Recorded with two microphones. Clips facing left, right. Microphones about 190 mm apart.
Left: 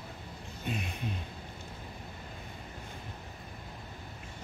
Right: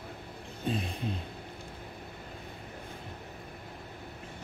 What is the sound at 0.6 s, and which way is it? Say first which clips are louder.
Music: right 4 dB; 30° right (ahead or behind).